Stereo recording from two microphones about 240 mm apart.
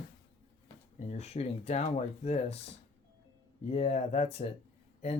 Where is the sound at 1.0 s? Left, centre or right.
Left.